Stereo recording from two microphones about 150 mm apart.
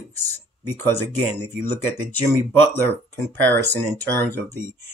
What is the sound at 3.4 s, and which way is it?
Speech, 15° left (ahead or behind).